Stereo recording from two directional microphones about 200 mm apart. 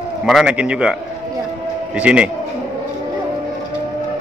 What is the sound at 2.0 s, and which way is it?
Speech, 5° right (ahead or behind).